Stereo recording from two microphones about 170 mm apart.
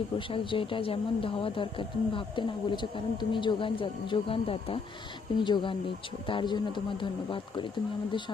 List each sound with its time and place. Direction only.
0.2 s speech: 30° left (ahead or behind)